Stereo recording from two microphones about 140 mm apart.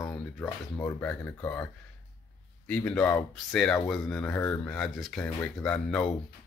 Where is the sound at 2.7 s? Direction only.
10° left (ahead or behind).